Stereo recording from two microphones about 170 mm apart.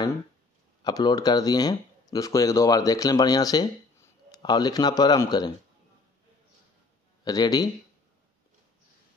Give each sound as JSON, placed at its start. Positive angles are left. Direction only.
{"t": 0.8, "sound": "speech", "side_deg": 25}
{"t": 7.2, "sound": "speech", "side_deg": 25}